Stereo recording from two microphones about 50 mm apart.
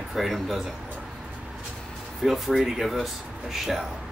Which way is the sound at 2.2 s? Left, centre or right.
Centre.